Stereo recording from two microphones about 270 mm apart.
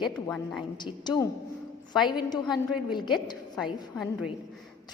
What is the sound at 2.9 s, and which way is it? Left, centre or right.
Speech, centre.